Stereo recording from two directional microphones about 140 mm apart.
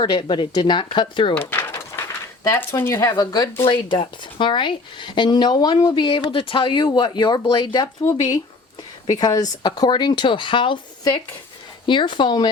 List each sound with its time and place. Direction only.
0.0 s speech: 35° left (ahead or behind)
1.4 s door: 15° left (ahead or behind)
2.5 s speech: 15° left (ahead or behind); by 12.5 s 35° left (ahead or behind)